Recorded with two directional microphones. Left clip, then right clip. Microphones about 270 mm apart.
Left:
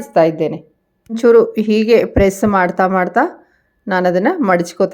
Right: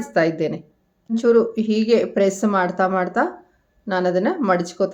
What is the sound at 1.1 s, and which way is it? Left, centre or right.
Speech, left.